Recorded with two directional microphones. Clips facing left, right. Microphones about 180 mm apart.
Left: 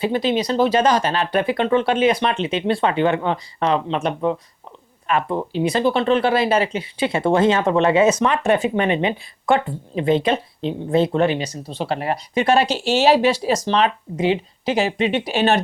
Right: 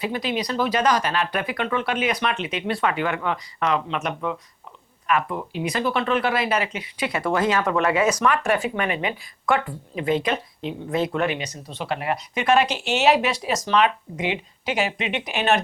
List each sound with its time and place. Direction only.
0.0 s speech: 30° left (ahead or behind)